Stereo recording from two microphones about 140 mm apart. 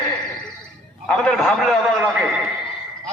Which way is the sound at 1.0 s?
10° left (ahead or behind).